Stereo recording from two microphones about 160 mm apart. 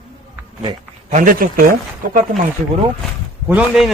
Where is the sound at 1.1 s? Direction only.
55° right (ahead or behind).